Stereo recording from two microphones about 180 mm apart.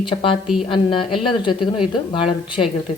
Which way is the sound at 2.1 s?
30° left (ahead or behind).